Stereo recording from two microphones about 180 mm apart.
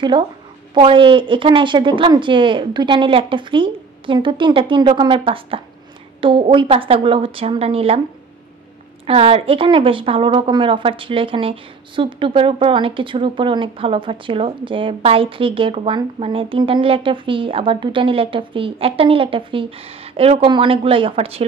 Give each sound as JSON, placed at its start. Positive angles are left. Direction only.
{"t": 0.7, "sound": "a woman's voice", "side_deg": -25}
{"t": 9.0, "sound": "a woman's voice", "side_deg": -30}